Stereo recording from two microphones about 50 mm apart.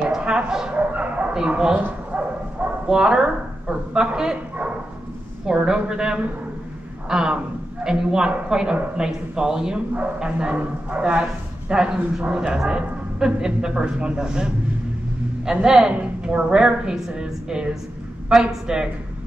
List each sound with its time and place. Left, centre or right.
0.0 s bow-wow: centre
0.7 s bow-wow: right
1.5 s a man's voice: centre
2.1 s bow-wow: right
2.9 s a man's voice: centre
5.5 s a man's voice: centre